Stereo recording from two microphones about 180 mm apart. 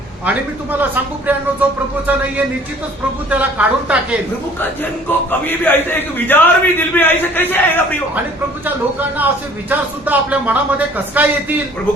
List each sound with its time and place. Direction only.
0.3 s speech: 10° right (ahead or behind)
3.2 s speech: 5° right (ahead or behind)
5.3 s a man's voice: 10° left (ahead or behind)
8.6 s speech: 10° right (ahead or behind)